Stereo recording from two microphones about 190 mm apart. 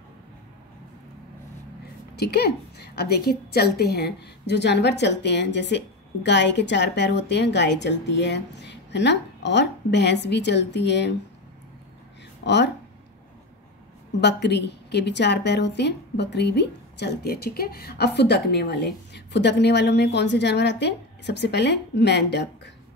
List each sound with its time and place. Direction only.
2.1 s a woman's voice: 60° left (ahead or behind)
12.4 s a woman's voice: 65° left (ahead or behind)
14.2 s a woman's voice: 65° left (ahead or behind)